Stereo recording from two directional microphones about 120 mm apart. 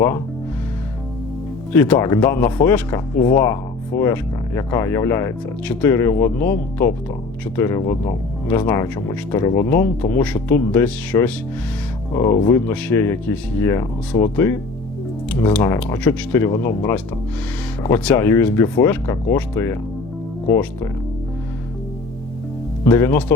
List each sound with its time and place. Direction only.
1.7 s speech: 20° left (ahead or behind)
12.1 s speech: 30° left (ahead or behind)
12.5 s speech: 20° left (ahead or behind)
15.8 s speech: 15° left (ahead or behind)
22.8 s speech: 20° left (ahead or behind)